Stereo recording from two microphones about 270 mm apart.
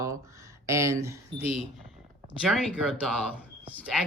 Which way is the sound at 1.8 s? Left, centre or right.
Centre.